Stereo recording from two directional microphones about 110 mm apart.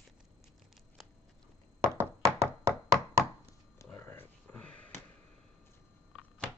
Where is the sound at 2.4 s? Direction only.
25° right (ahead or behind).